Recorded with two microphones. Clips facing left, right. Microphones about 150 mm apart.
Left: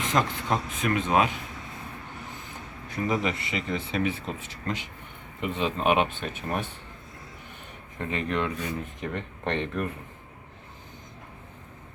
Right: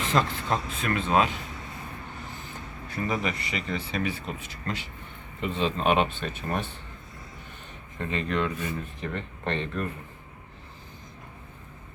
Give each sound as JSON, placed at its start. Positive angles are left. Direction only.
{"t": 0.0, "sound": "speech", "side_deg": 15}
{"t": 2.9, "sound": "speech", "side_deg": 20}
{"t": 7.9, "sound": "speech", "side_deg": 15}